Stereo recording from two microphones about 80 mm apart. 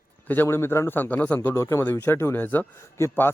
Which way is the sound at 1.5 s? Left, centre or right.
Left.